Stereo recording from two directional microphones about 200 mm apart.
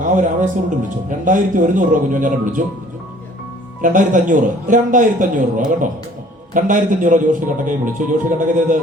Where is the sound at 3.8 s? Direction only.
40° right (ahead or behind).